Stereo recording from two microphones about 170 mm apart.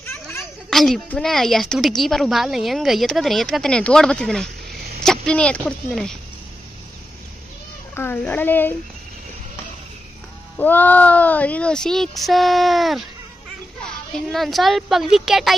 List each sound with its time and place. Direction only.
0.0 s a sound: 15° left (ahead or behind)
0.7 s a woman's voice: centre (ahead or behind)
4.6 s a sound: 65° right (ahead or behind)
5.0 s a woman's voice: 5° left (ahead or behind)
7.9 s speech: 10° left (ahead or behind)
10.6 s a woman's voice: 10° left (ahead or behind)
14.3 s a woman's voice: centre (ahead or behind)